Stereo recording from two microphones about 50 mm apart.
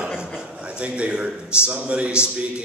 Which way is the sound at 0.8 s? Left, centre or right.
Right.